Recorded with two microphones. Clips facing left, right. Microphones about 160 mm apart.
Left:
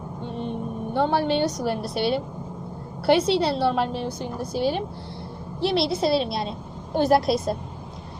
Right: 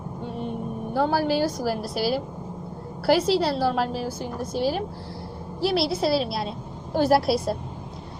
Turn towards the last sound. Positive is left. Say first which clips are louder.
# even
turn(degrees=-5)  # may be behind; listen again after turning